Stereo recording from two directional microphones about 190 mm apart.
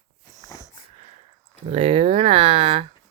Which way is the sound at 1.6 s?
30° right (ahead or behind).